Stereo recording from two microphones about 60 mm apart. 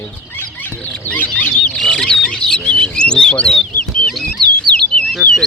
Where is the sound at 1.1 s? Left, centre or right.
Left.